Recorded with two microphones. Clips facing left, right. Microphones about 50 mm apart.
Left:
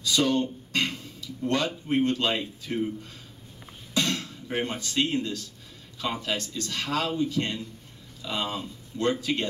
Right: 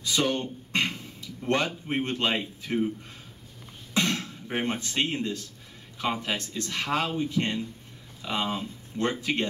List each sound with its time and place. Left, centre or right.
0.0 s a sound: right
1.9 s speech: right
3.9 s music: right
6.2 s speech: right